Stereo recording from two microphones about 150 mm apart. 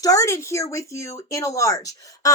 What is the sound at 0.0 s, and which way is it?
A woman's voice, 20° left (ahead or behind).